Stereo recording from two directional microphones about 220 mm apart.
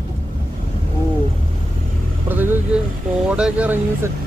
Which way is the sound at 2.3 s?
10° right (ahead or behind).